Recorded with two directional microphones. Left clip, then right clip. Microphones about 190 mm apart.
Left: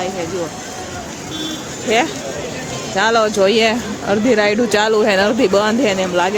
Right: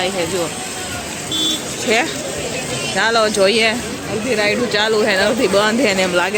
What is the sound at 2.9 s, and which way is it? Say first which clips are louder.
Speech: left 1 dB; 15° left (ahead or behind).